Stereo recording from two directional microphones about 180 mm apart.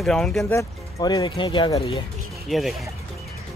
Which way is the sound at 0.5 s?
20° left (ahead or behind).